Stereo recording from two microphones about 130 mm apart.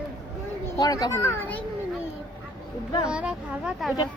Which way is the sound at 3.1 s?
10° right (ahead or behind).